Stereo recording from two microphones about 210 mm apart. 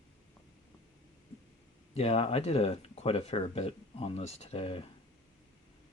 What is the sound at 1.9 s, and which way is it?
Speech, 30° left (ahead or behind).